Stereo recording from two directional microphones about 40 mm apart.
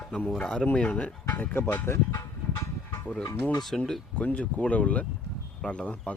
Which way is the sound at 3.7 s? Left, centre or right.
Centre.